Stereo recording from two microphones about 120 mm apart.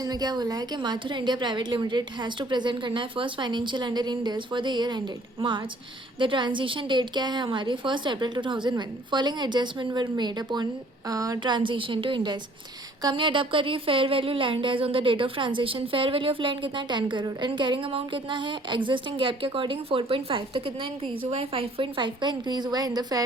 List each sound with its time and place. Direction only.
0.0 s a woman's voice: 35° right (ahead or behind)